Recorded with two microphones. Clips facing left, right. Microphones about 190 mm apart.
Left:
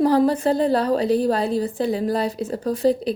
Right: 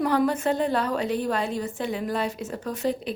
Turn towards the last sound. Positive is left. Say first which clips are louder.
# left 8 dB
turn(degrees=35)  # may be behind; listen again after turning